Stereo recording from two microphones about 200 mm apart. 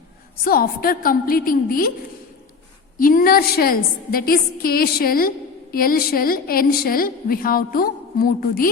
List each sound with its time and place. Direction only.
0.4 s a woman's voice: 50° left (ahead or behind)
3.0 s a woman's voice: 45° left (ahead or behind)